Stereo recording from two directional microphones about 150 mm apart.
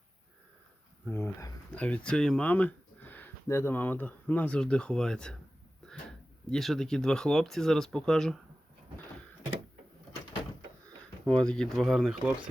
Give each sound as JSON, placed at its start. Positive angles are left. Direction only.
{"t": 1.0, "sound": "speech", "side_deg": 15}
{"t": 11.3, "sound": "speech", "side_deg": 5}